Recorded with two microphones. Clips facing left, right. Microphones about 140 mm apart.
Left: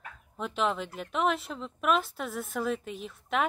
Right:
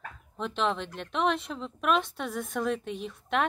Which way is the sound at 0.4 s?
5° left (ahead or behind).